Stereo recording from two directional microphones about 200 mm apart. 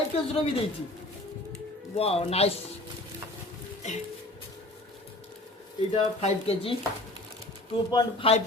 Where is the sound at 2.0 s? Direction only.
30° left (ahead or behind).